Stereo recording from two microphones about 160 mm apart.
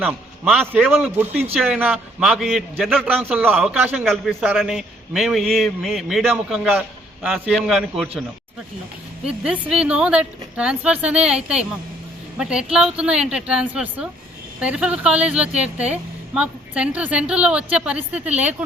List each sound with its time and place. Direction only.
0.0 s a woman's voice: 10° right (ahead or behind)
9.2 s a woman's voice: 5° right (ahead or behind)